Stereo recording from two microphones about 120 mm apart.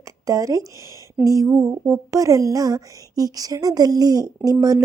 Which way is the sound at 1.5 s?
20° right (ahead or behind).